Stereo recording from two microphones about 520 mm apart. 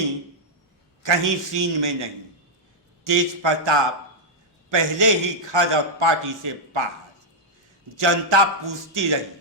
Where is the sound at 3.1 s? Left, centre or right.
Right.